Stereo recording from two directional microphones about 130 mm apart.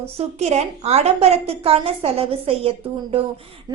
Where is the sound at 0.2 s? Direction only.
55° right (ahead or behind).